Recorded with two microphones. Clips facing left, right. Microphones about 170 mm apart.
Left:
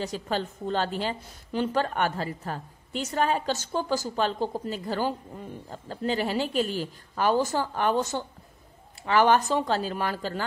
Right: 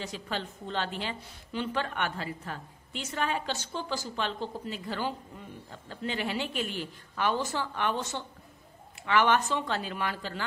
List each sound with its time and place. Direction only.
0.0 s a woman's voice: 40° left (ahead or behind)